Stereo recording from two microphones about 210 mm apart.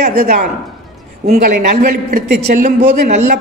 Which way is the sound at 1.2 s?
35° right (ahead or behind).